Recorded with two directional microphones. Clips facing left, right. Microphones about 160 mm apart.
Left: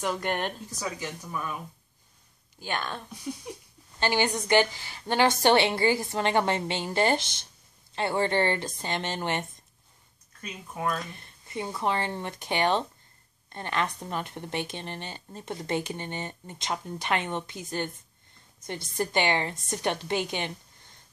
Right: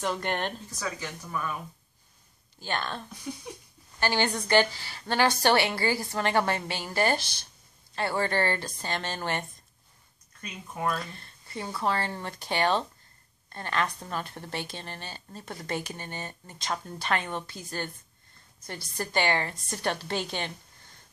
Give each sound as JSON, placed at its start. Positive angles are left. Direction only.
{"t": 0.0, "sound": "speech", "side_deg": 10}
{"t": 2.6, "sound": "speech", "side_deg": 10}
{"t": 4.0, "sound": "speech", "side_deg": 15}
{"t": 11.1, "sound": "speech", "side_deg": 15}